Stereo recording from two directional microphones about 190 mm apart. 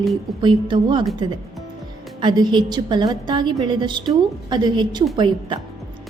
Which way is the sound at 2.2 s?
25° right (ahead or behind).